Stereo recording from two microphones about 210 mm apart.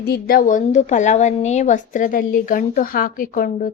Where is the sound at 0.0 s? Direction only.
45° left (ahead or behind).